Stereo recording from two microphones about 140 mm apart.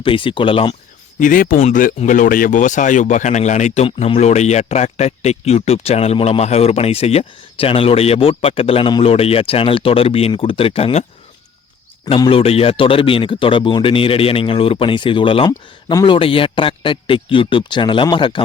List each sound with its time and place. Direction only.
0.0 s speech: 40° left (ahead or behind)
1.2 s speech: 80° left
1.6 s speech: 70° left (ahead or behind)
3.8 s speech: 40° left (ahead or behind)
12.0 s speech: 40° left (ahead or behind)